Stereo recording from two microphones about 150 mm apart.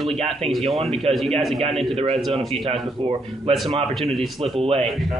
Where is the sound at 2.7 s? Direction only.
40° right (ahead or behind).